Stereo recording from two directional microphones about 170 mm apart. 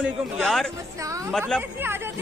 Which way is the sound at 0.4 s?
Centre (ahead or behind).